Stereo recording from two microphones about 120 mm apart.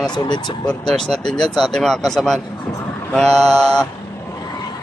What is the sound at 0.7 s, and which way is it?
A man's voice, 5° left (ahead or behind).